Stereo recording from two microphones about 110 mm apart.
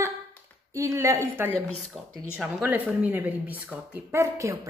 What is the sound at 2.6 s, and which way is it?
Speech, 15° right (ahead or behind).